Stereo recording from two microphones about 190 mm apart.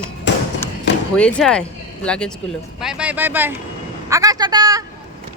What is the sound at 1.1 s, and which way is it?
A man's voice, 5° left (ahead or behind).